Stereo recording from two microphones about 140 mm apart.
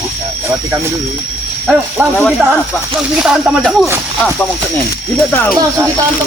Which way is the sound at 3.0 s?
5° right (ahead or behind).